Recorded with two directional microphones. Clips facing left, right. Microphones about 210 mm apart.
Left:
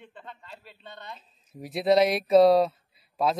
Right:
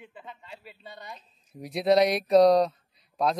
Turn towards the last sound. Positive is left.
turn(degrees=5)  # may be behind; listen again after turning